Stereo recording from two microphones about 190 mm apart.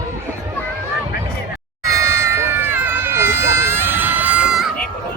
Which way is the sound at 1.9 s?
15° right (ahead or behind).